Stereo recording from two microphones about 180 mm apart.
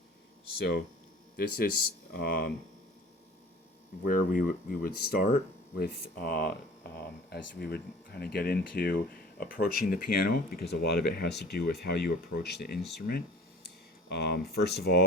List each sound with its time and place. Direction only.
0.6 s speech: 65° left (ahead or behind)
4.1 s speech: 50° left (ahead or behind); by 15.0 s 65° left (ahead or behind)